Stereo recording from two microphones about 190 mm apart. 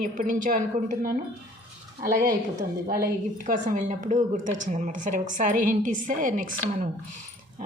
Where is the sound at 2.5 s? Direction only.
45° right (ahead or behind).